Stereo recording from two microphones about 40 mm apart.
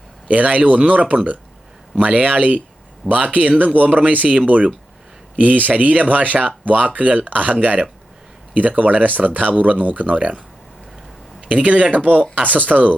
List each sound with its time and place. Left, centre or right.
0.3 s speech: right